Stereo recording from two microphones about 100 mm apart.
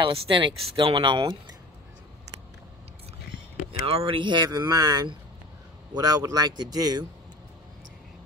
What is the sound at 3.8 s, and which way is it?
Speech, 75° right (ahead or behind).